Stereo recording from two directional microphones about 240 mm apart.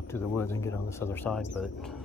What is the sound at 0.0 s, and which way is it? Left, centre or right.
Speech, centre.